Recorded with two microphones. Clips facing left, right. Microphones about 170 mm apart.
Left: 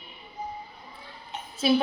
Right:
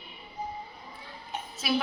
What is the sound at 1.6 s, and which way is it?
Speech, 30° left (ahead or behind).